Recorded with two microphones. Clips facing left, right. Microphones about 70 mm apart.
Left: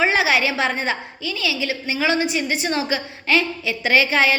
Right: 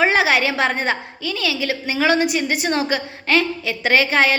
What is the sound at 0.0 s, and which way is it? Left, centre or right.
A woman's voice, right.